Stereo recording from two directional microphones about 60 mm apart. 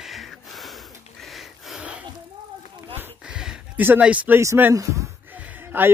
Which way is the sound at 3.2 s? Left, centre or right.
Centre.